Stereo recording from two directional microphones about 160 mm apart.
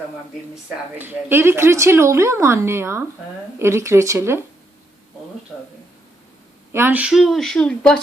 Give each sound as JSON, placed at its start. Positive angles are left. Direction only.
{"t": 0.9, "sound": "a woman's voice", "side_deg": -15}
{"t": 6.7, "sound": "speech", "side_deg": -15}